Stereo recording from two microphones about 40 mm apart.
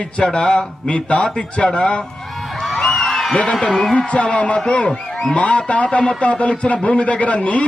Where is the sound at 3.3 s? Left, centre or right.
Left.